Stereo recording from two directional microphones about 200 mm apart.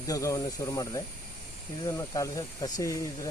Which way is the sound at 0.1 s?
15° left (ahead or behind).